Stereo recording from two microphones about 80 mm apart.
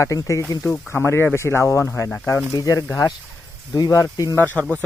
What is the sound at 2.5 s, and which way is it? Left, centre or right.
Speech, left.